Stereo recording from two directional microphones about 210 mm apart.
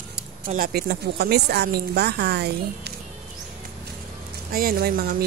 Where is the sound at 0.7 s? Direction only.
50° right (ahead or behind).